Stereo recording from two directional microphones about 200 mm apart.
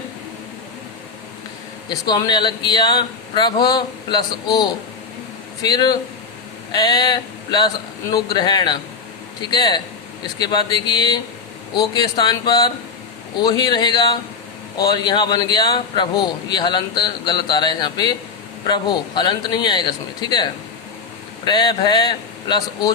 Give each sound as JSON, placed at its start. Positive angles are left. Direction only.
{"t": 1.9, "sound": "a man's voice", "side_deg": 20}